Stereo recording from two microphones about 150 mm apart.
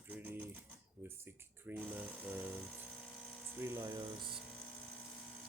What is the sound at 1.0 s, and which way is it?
Dental drill, 15° right (ahead or behind).